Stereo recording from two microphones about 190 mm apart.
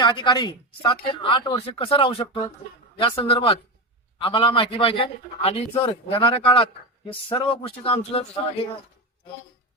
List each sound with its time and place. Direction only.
0.0 s a man's voice: 25° left (ahead or behind)